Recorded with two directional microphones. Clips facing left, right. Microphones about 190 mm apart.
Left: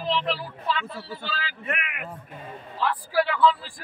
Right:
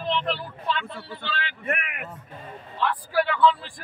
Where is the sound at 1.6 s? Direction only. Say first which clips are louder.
Right 3 dB; 45° right (ahead or behind).